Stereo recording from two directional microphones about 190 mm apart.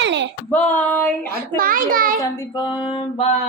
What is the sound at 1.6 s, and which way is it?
Speech, 50° right (ahead or behind).